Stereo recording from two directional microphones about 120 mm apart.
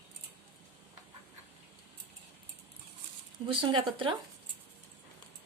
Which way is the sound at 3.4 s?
45° right (ahead or behind).